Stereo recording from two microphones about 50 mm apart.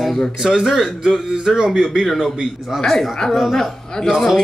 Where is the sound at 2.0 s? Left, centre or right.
Centre.